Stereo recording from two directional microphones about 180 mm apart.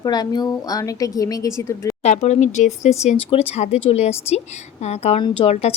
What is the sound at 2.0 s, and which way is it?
Speech, 40° left (ahead or behind).